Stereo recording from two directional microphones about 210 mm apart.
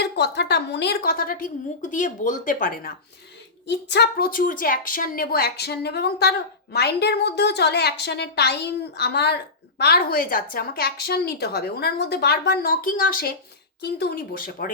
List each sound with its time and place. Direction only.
0.0 s a woman's voice: 50° left (ahead or behind)
3.7 s a woman's voice: 55° left (ahead or behind)